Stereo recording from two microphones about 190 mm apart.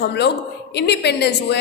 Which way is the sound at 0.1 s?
65° left (ahead or behind).